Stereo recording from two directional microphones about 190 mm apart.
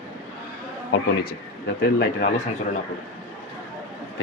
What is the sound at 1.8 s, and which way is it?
Speech, 50° left (ahead or behind).